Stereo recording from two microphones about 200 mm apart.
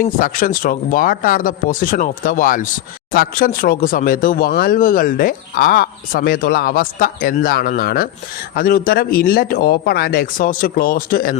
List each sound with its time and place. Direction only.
0.0 s speech: 40° left (ahead or behind)